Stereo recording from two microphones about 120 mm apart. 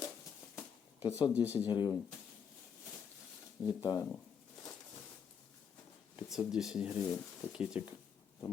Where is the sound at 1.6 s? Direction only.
40° left (ahead or behind).